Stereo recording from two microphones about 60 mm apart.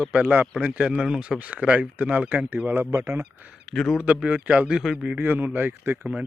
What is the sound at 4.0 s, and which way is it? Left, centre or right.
Speech, centre.